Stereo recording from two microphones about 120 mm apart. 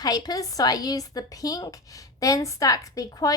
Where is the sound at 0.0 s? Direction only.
30° left (ahead or behind).